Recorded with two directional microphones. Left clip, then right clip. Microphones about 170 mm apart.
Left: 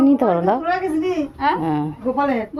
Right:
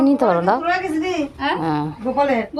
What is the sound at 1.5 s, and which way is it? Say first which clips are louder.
Speech: even; 15° left (ahead or behind).